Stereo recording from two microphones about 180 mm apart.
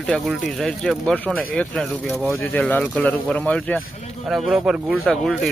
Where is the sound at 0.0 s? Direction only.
Centre (ahead or behind).